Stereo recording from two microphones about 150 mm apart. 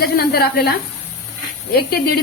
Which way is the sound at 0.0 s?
90° left.